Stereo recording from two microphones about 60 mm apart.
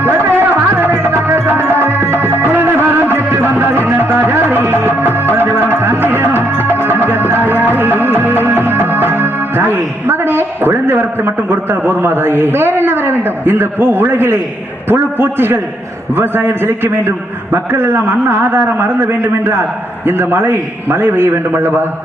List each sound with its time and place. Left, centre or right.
0.0 s music: right
14.8 s a man's voice: right